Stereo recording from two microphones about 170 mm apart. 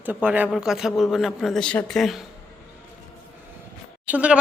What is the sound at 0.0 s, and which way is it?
Speech, 10° right (ahead or behind).